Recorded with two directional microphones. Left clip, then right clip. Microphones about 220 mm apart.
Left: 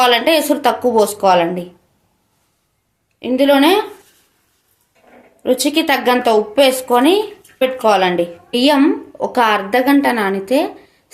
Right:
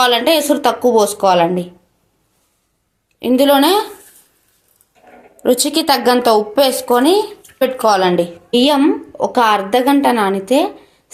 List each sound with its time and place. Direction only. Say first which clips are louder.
0.0 s a woman's voice: even; 15° right (ahead or behind)
3.2 s a woman's voice: right 1 dB; 25° right (ahead or behind)
5.4 s a woman's voice: right 1 dB; 30° right (ahead or behind)